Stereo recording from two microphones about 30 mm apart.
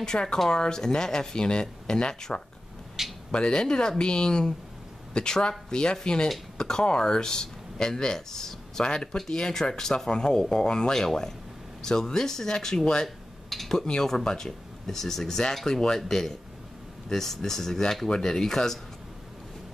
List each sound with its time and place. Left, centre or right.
0.1 s speech: left
0.5 s speech: left
8.8 s speech: left
13.0 s a sound: centre
14.0 s speech: centre